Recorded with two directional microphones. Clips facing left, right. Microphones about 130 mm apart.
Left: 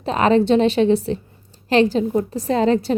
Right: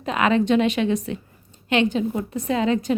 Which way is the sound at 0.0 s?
35° left (ahead or behind).